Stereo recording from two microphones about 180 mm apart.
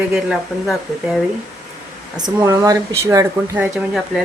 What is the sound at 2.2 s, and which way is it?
Speech, 20° right (ahead or behind).